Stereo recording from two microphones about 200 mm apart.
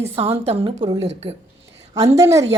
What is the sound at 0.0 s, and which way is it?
A woman's voice, 30° right (ahead or behind).